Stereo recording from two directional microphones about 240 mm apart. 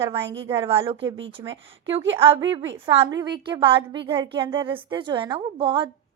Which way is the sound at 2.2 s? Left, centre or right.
Centre.